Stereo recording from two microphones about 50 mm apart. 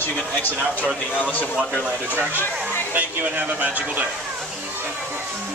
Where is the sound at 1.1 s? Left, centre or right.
Left.